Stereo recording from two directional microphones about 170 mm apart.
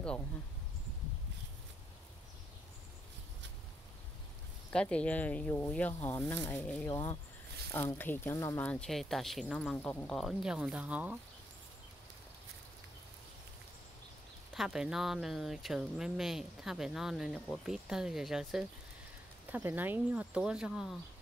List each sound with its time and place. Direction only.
4.7 s speech: 5° left (ahead or behind)
14.5 s speech: 5° right (ahead or behind)